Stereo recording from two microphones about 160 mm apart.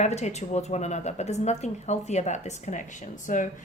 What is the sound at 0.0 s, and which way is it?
Speech, 45° left (ahead or behind).